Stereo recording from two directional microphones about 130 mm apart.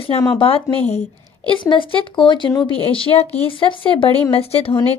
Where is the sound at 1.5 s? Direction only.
40° left (ahead or behind).